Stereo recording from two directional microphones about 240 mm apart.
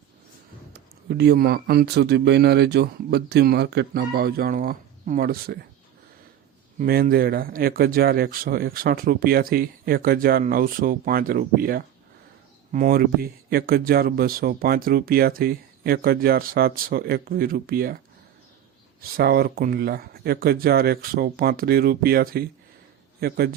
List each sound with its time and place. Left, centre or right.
0.7 s speech: right
6.7 s speech: right
19.0 s speech: right